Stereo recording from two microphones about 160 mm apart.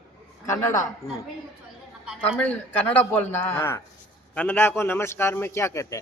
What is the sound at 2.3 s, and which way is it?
A man's voice, 10° left (ahead or behind).